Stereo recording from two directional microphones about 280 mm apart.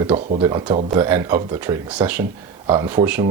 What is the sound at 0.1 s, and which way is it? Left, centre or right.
Speech, centre.